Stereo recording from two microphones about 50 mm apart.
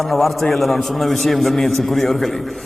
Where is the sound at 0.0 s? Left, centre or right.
Centre.